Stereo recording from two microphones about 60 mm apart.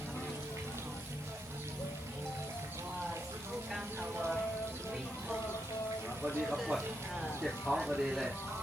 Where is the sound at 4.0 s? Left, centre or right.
Right.